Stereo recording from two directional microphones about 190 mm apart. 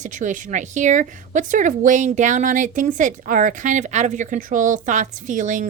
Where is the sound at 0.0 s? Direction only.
40° right (ahead or behind).